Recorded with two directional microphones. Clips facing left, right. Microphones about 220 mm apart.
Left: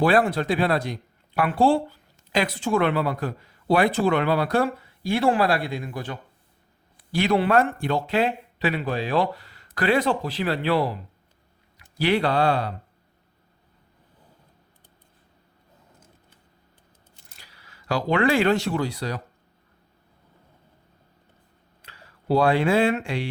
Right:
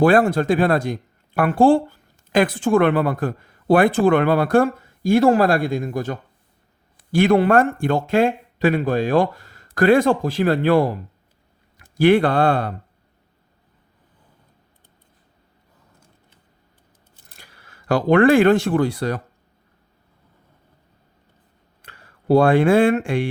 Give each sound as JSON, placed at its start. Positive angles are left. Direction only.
{"t": 0.0, "sound": "speech", "side_deg": -45}
{"t": 17.3, "sound": "speech", "side_deg": -50}
{"t": 21.8, "sound": "speech", "side_deg": -50}